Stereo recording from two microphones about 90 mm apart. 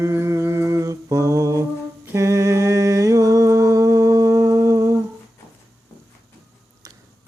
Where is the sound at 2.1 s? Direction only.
35° right (ahead or behind).